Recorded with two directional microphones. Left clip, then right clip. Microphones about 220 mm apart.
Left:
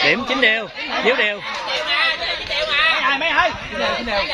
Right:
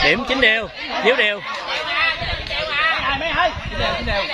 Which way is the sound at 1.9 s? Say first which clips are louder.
Left 1 dB; 45° left (ahead or behind).